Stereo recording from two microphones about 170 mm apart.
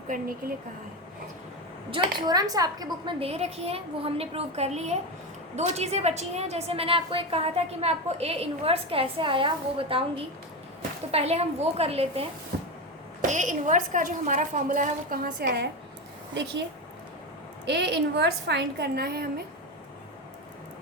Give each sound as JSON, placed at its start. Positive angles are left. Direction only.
{"t": 0.1, "sound": "a woman's voice", "side_deg": -60}
{"t": 1.9, "sound": "a woman's voice", "side_deg": -30}
{"t": 3.2, "sound": "a woman's voice", "side_deg": -35}
{"t": 13.2, "sound": "a woman's voice", "side_deg": -45}
{"t": 17.7, "sound": "a woman's voice", "side_deg": -90}